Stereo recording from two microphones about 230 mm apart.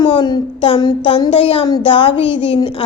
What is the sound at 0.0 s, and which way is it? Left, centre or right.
Speech, centre.